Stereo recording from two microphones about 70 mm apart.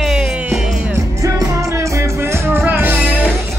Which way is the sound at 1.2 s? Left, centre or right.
Right.